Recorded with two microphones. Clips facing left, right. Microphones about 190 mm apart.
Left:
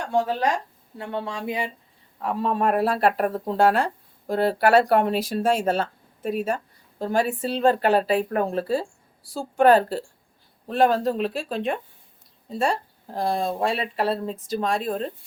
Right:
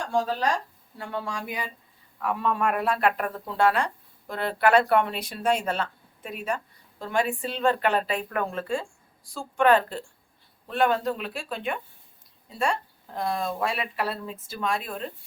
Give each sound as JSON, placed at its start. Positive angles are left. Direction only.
{"t": 0.0, "sound": "speech", "side_deg": 20}